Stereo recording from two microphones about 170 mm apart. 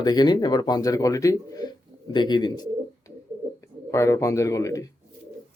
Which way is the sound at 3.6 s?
15° left (ahead or behind).